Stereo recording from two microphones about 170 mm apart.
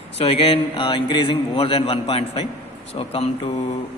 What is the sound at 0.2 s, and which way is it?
A man's voice, 35° left (ahead or behind).